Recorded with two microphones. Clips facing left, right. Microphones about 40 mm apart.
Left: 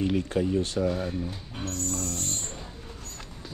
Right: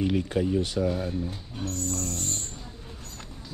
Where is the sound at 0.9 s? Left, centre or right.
Centre.